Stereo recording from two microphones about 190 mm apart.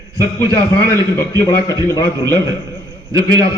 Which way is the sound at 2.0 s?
20° right (ahead or behind).